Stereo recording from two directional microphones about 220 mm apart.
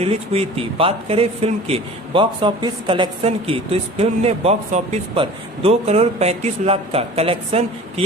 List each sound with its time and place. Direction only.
0.0 s speech: 25° right (ahead or behind)